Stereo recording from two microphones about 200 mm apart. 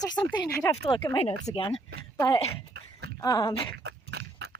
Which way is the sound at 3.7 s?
55° right (ahead or behind).